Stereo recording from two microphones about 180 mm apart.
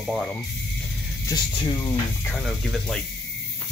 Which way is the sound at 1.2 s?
25° left (ahead or behind).